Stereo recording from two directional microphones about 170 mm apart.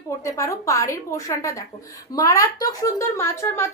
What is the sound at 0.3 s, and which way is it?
A woman's voice, 20° left (ahead or behind).